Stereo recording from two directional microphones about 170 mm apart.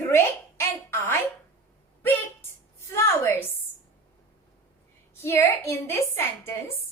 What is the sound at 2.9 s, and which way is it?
Speech, 15° left (ahead or behind).